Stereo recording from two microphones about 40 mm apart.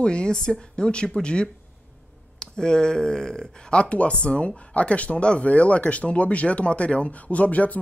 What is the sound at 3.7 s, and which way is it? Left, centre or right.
Speech, left.